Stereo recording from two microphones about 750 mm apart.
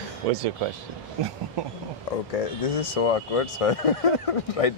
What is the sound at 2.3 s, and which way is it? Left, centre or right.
Speech, left.